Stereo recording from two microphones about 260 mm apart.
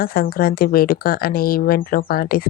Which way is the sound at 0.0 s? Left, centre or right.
Left.